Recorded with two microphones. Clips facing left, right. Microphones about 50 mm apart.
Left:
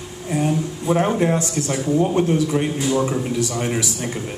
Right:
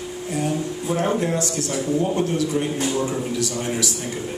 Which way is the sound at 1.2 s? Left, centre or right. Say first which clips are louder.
Left 3 dB; left.